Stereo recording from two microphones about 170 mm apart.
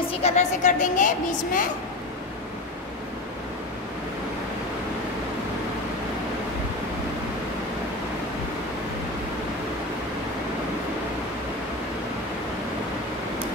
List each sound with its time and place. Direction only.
0.1 s a woman's voice: 40° left (ahead or behind)